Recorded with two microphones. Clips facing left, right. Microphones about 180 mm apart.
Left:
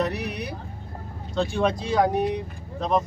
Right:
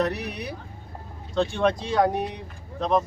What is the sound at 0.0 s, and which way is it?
A man's voice, centre (ahead or behind).